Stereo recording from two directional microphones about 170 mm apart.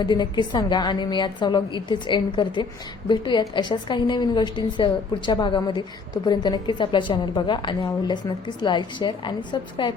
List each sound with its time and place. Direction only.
0.0 s a woman's voice: 25° left (ahead or behind)